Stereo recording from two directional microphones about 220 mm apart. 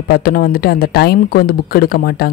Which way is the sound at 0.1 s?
40° left (ahead or behind).